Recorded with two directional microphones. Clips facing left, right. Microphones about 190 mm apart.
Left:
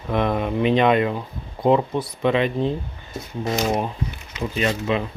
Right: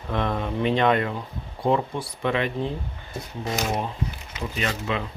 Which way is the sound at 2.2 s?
20° left (ahead or behind).